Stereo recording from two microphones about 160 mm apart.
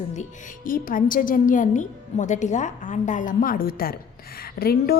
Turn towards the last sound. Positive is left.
turn(degrees=75)  # may be behind; listen again after turning